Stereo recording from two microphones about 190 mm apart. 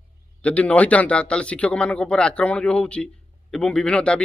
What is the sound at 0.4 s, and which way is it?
Speech, 5° left (ahead or behind).